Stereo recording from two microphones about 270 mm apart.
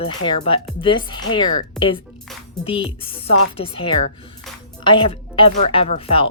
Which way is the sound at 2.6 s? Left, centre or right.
Left.